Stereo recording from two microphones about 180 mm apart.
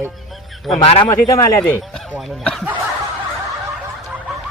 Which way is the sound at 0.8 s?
30° left (ahead or behind).